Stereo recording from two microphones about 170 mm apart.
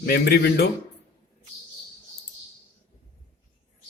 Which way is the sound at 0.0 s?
70° left (ahead or behind).